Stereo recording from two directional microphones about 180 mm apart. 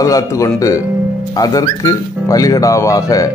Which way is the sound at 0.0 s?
15° left (ahead or behind).